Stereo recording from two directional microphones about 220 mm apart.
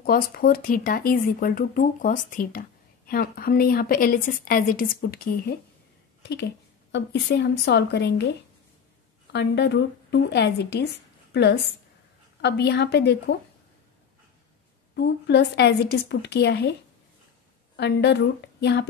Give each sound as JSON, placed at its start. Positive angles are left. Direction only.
{"t": 0.0, "sound": "a woman's voice", "side_deg": 40}
{"t": 9.3, "sound": "a woman's voice", "side_deg": 50}
{"t": 15.0, "sound": "a woman's voice", "side_deg": 50}
{"t": 17.7, "sound": "a woman's voice", "side_deg": 50}